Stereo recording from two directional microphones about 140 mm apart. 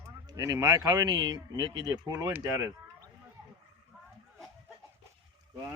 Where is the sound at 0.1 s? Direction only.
25° right (ahead or behind).